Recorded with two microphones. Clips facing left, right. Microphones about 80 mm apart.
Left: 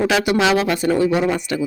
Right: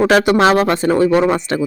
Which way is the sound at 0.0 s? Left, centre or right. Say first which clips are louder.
Right 5 dB; right.